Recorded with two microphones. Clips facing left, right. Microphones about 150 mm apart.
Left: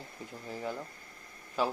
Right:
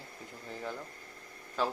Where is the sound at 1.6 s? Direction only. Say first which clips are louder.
Left 2 dB; 10° left (ahead or behind).